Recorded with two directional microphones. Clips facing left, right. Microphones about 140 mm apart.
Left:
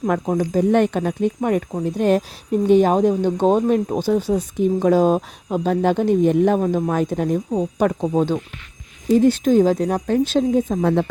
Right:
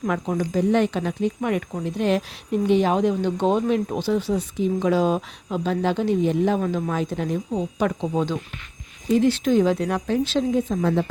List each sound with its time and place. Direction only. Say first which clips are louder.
0.1 s speech: left 4 dB; 40° left (ahead or behind)
6.6 s speech: left 5 dB; 40° left (ahead or behind)
9.1 s speech: left 4 dB; 45° left (ahead or behind)